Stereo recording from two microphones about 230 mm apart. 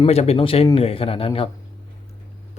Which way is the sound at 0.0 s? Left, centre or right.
Left.